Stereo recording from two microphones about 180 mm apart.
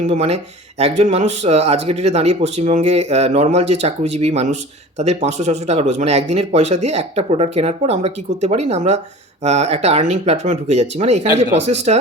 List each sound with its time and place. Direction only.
0.1 s speech: 35° right (ahead or behind)